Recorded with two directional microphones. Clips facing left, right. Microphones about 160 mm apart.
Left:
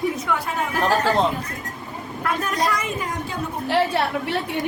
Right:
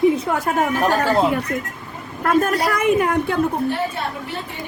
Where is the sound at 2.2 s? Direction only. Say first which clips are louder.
Right 8 dB; 50° right (ahead or behind).